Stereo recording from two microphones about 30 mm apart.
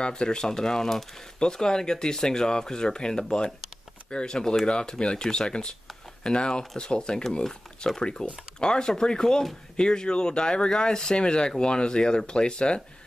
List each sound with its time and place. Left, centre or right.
0.0 s speech: left; by 1.0 s centre
1.4 s speech: left